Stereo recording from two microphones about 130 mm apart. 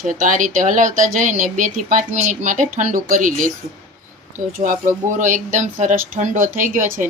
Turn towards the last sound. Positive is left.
turn(degrees=-85)